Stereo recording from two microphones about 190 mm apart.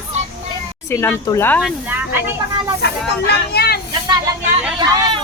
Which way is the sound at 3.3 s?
55° left (ahead or behind).